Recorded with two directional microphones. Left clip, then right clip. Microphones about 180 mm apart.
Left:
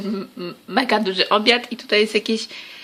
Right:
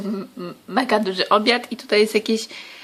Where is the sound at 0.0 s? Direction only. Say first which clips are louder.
Left 1 dB; centre (ahead or behind).